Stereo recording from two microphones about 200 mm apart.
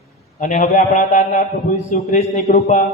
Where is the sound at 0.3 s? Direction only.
40° left (ahead or behind).